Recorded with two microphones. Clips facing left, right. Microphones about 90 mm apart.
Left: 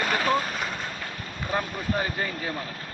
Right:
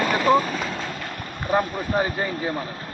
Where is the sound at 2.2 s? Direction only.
15° right (ahead or behind).